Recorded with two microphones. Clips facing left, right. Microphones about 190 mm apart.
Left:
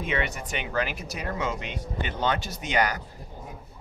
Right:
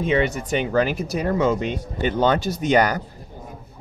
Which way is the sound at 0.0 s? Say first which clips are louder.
Right 9 dB; 30° right (ahead or behind).